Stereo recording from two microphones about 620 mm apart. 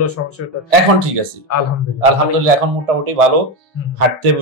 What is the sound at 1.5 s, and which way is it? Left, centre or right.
Speech, left.